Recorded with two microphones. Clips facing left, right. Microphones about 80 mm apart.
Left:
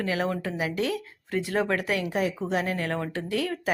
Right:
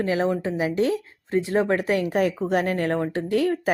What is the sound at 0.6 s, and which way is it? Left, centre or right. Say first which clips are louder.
Speech: right 6 dB; right.